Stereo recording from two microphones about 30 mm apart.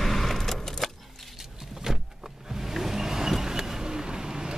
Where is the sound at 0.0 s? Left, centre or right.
Centre.